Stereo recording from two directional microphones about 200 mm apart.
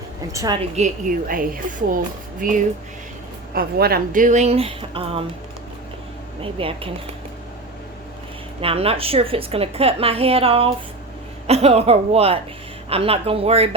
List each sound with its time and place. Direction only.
0.3 s a woman's voice: 20° right (ahead or behind)
0.8 s speech: 40° right (ahead or behind)
6.4 s a woman's voice: 25° right (ahead or behind)
8.6 s a woman's voice: 30° right (ahead or behind)